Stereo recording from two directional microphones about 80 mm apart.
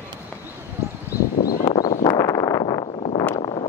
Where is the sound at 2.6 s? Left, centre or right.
Left.